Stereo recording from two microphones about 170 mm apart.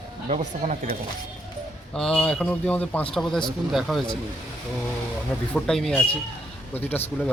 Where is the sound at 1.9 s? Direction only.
5° left (ahead or behind).